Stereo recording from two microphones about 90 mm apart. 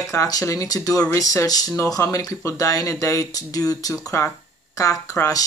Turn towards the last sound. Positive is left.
turn(degrees=35)  # may be behind; listen again after turning